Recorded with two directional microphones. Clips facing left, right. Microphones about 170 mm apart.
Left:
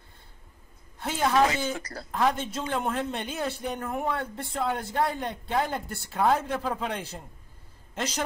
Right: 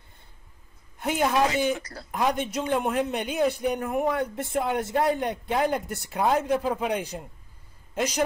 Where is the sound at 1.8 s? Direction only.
50° left (ahead or behind).